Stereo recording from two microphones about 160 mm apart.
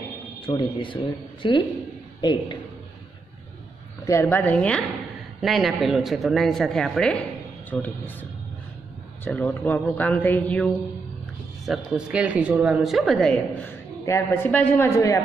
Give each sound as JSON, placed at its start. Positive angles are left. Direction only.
{"t": 0.5, "sound": "a woman's voice", "side_deg": 30}
{"t": 4.0, "sound": "a woman's voice", "side_deg": 15}
{"t": 11.6, "sound": "a woman's voice", "side_deg": 0}
{"t": 14.0, "sound": "speech", "side_deg": 15}